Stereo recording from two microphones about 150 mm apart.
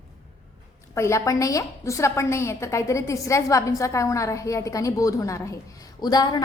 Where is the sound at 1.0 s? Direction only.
20° left (ahead or behind).